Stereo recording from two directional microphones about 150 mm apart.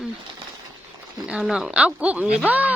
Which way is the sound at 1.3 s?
Centre (ahead or behind).